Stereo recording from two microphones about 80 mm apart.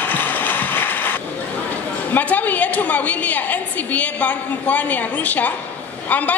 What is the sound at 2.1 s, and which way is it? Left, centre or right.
A woman's voice, left.